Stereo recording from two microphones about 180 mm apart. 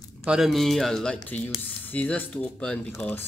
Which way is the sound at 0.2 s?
5° right (ahead or behind).